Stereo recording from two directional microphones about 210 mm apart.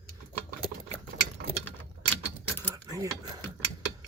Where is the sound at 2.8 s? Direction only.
15° right (ahead or behind).